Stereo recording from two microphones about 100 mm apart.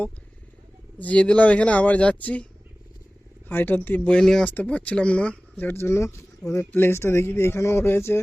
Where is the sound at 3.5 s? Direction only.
20° left (ahead or behind).